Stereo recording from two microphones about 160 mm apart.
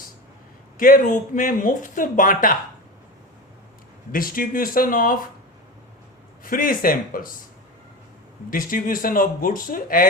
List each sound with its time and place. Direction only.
0.8 s speech: 60° left (ahead or behind)
4.1 s speech: 60° left (ahead or behind)
6.4 s speech: 60° left (ahead or behind)
8.4 s speech: 60° left (ahead or behind)